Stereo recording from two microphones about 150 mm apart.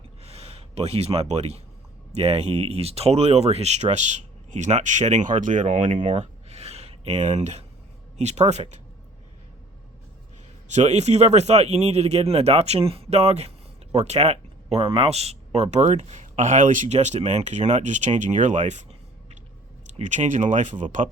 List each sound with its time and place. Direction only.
0.2 s gasp: 40° right (ahead or behind)
2.1 s speech: 45° right (ahead or behind)
5.9 s a sound: 40° right (ahead or behind)
8.2 s speech: 50° right (ahead or behind)
10.7 s speech: 50° right (ahead or behind)
19.9 s speech: 55° right (ahead or behind)